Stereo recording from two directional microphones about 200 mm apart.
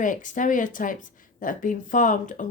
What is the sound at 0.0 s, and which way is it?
Speech, 40° left (ahead or behind).